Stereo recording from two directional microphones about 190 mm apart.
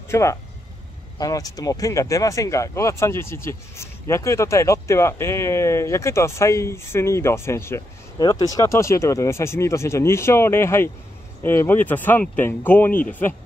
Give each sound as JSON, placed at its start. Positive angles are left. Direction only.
{"t": 0.1, "sound": "speech", "side_deg": 15}